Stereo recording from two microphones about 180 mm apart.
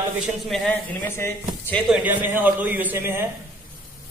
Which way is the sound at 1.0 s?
15° left (ahead or behind).